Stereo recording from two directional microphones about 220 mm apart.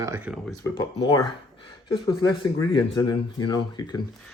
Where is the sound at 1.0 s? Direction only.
20° left (ahead or behind).